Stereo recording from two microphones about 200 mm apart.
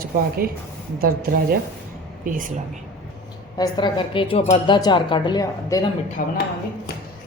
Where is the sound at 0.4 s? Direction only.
50° right (ahead or behind).